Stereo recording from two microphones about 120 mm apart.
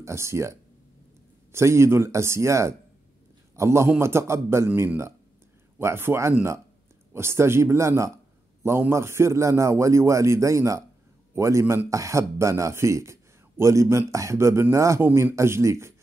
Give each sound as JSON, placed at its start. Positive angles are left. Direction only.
{"t": 0.0, "sound": "a man's voice", "side_deg": -25}
{"t": 15.0, "sound": "a man's voice", "side_deg": -15}